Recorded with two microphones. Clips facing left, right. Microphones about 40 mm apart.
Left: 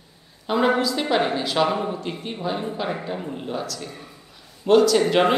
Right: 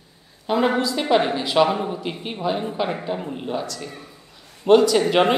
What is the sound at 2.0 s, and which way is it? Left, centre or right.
Speech, right.